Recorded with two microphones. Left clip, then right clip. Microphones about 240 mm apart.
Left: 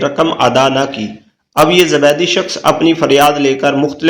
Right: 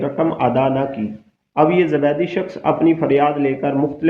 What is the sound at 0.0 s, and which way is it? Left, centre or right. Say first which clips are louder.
A man's voice: left 6 dB; centre.